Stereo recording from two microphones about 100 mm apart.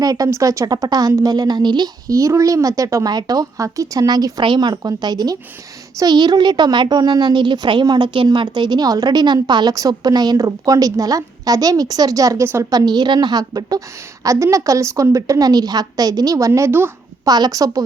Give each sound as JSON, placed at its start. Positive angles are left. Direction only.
{"t": 0.0, "sound": "a woman's voice", "side_deg": -40}
{"t": 16.5, "sound": "speech", "side_deg": -25}
{"t": 17.2, "sound": "a woman's voice", "side_deg": -40}